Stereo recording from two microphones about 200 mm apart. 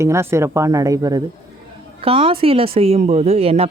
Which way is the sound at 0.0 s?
15° right (ahead or behind).